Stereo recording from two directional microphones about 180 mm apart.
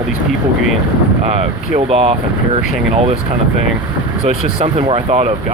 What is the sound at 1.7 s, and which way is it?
Speech, 35° right (ahead or behind).